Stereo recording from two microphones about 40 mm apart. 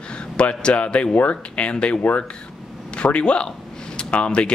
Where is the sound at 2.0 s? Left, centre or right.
Left.